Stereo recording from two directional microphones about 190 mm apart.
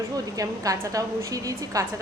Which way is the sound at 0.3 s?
20° right (ahead or behind).